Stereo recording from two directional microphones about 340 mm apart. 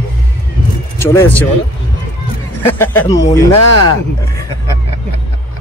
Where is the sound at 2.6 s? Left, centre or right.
Centre.